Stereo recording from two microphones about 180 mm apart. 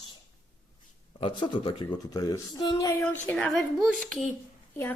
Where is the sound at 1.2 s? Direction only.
25° left (ahead or behind).